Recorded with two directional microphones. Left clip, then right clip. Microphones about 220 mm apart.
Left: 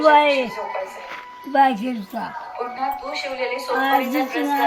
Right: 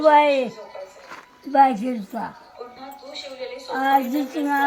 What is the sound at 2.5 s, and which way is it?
A woman's voice, 30° left (ahead or behind).